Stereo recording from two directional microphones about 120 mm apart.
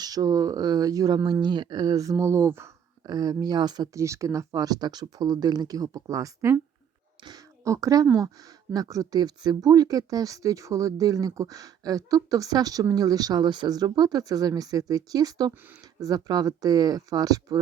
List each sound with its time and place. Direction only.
0.0 s speech: 30° right (ahead or behind)
3.1 s speech: 35° right (ahead or behind)